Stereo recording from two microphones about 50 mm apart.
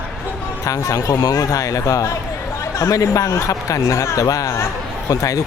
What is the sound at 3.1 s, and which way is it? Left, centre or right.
Speech, left.